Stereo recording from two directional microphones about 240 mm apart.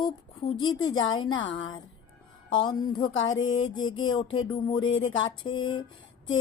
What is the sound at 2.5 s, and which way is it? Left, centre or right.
Speech, centre.